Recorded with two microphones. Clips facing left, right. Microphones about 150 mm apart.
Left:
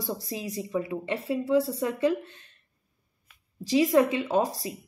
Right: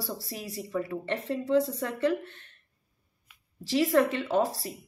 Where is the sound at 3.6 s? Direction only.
15° left (ahead or behind).